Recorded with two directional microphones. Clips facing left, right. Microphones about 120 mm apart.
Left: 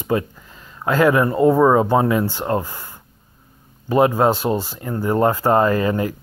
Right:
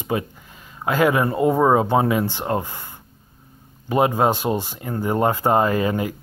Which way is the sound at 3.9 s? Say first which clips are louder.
Left 3 dB; 20° right (ahead or behind).